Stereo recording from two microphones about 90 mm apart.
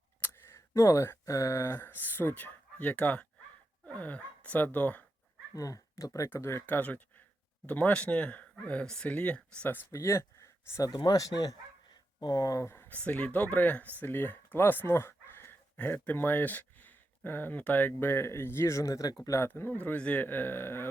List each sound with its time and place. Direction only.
0.2 s speech: 30° left (ahead or behind)
5.5 s speech: 40° left (ahead or behind)
6.3 s speech: 25° left (ahead or behind)
9.6 s speech: 30° left (ahead or behind)
10.9 s speech: 50° left (ahead or behind)
19.5 s speech: 20° left (ahead or behind)